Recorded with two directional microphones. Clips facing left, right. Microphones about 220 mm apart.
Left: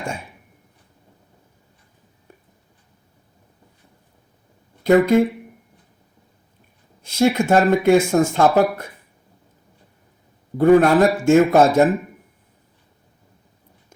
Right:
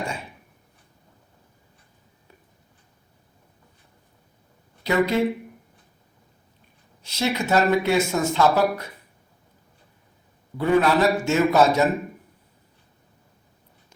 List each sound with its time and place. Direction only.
4.8 s speech: 50° left (ahead or behind)
7.0 s speech: 50° left (ahead or behind)
10.6 s speech: 50° left (ahead or behind)